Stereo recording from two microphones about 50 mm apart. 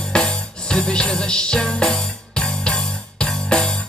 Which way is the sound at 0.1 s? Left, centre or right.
Centre.